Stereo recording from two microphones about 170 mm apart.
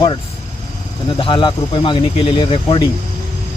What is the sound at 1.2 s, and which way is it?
Speech, 30° left (ahead or behind).